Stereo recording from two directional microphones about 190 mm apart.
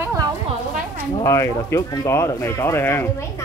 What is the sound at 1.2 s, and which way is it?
Speech, 15° left (ahead or behind).